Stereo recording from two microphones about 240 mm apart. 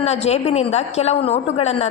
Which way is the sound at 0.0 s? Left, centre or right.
Left.